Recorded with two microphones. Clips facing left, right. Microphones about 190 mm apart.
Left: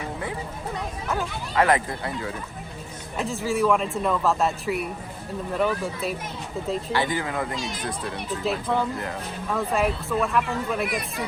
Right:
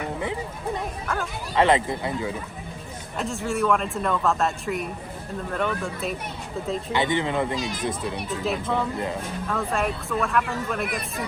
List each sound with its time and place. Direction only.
1.5 s speech: 25° right (ahead or behind)
3.2 s speech: centre (ahead or behind)
6.9 s speech: 20° right (ahead or behind)
8.4 s speech: centre (ahead or behind)